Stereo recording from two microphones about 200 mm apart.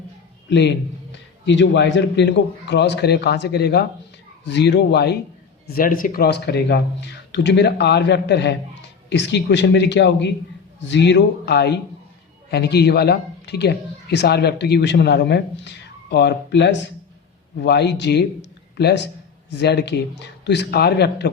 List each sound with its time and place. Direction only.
0.5 s speech: 60° left (ahead or behind)